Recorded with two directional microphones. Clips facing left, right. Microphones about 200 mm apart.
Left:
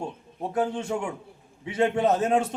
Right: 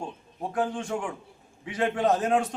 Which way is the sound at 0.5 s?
25° left (ahead or behind).